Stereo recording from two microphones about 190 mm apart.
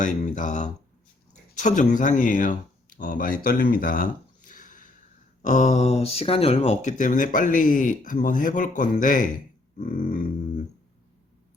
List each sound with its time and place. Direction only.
0.0 s speech: 40° left (ahead or behind)